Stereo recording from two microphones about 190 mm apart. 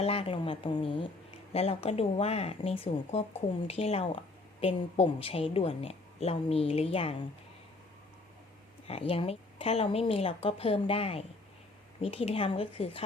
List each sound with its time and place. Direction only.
0.0 s a woman's voice: 30° left (ahead or behind)
8.9 s a woman's voice: 30° left (ahead or behind)